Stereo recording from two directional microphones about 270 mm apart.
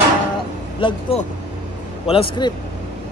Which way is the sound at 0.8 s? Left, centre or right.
Left.